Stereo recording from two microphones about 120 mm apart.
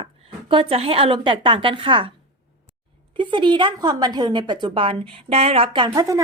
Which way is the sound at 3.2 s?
40° right (ahead or behind).